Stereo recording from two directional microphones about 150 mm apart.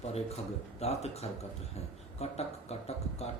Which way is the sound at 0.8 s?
45° left (ahead or behind).